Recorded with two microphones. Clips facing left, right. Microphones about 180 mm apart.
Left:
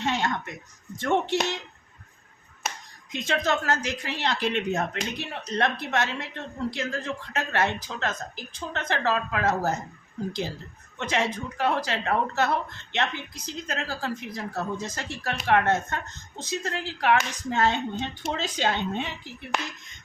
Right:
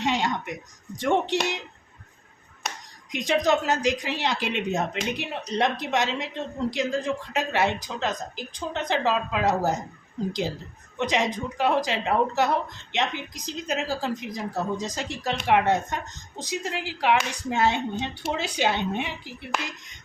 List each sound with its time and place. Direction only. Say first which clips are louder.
0.0 s a sound: right 2 dB; 15° right (ahead or behind)
0.9 s a woman's voice: right 1 dB; 15° right (ahead or behind)
3.1 s a woman's voice: right 4 dB; 15° right (ahead or behind)
10.9 s a woman's voice: right 2 dB; 15° right (ahead or behind)
19.5 s speech: even; centre (ahead or behind)